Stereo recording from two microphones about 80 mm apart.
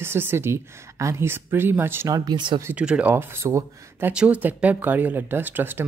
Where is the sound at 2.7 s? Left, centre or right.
Centre; by 4.1 s right.